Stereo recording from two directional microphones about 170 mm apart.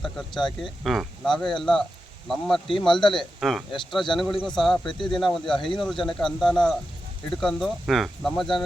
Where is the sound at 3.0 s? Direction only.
30° left (ahead or behind).